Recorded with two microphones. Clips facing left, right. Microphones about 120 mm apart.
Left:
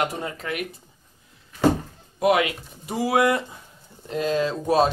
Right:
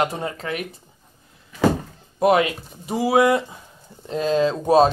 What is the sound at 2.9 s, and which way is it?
Speech, 20° right (ahead or behind).